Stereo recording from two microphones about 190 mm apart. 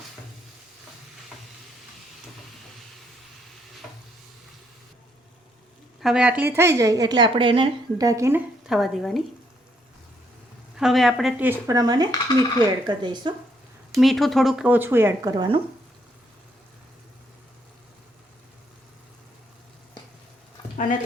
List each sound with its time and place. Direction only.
6.0 s a woman's voice: 5° right (ahead or behind)
8.6 s speech: centre (ahead or behind)
10.8 s a woman's voice: centre (ahead or behind); by 13.3 s 25° right (ahead or behind)
13.9 s a woman's voice: centre (ahead or behind); by 15.6 s 25° right (ahead or behind)